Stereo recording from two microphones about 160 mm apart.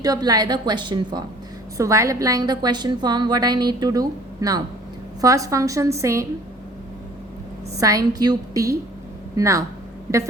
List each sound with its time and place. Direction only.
0.0 s a woman's voice: 25° right (ahead or behind)
7.8 s a woman's voice: 20° right (ahead or behind)